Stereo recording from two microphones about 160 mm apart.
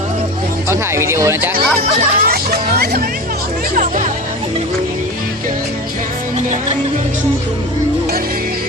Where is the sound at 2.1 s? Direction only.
65° right (ahead or behind).